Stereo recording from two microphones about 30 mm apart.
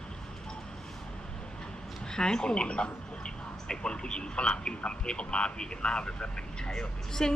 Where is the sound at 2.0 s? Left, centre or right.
Left.